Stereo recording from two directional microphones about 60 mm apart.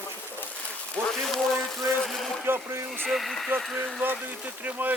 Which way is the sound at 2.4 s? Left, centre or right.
Right.